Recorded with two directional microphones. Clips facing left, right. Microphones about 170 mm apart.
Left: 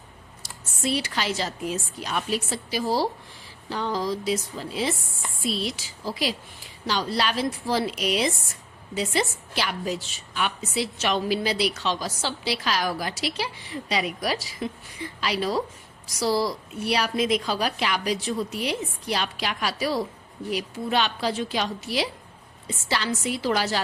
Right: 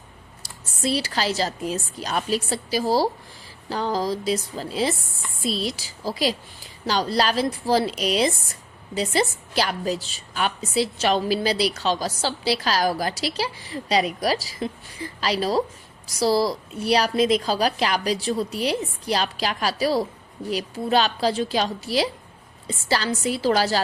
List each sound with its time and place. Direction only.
0.4 s a woman's voice: 35° right (ahead or behind)